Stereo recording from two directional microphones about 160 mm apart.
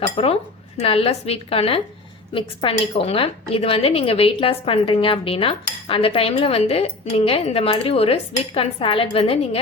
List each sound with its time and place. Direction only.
0.2 s speech: 40° left (ahead or behind)